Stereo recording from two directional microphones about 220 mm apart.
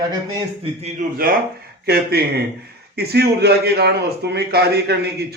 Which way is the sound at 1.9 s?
45° right (ahead or behind).